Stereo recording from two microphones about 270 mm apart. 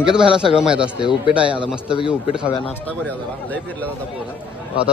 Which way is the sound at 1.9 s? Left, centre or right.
Centre.